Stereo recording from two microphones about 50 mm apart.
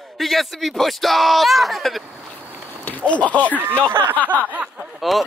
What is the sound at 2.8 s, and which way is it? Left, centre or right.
Speech, left.